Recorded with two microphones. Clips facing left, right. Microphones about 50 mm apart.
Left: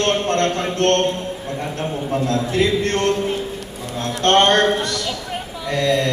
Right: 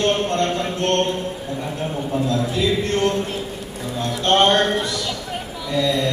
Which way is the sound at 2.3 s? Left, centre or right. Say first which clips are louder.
Left 3 dB; left.